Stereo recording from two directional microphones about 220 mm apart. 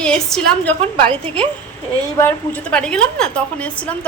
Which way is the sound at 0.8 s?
25° right (ahead or behind).